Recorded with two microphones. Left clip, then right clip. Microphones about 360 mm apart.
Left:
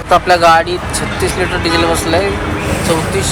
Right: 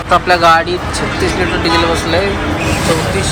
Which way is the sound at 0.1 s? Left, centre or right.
Centre.